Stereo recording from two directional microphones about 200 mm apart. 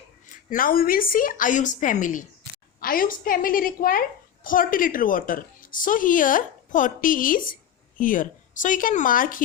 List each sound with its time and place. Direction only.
0.5 s a woman's voice: 45° left (ahead or behind)